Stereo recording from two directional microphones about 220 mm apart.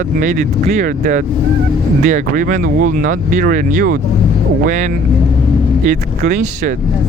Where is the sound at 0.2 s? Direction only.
35° right (ahead or behind).